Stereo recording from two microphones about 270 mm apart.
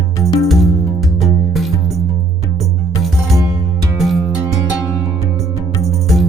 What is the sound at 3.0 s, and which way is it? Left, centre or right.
Music, centre.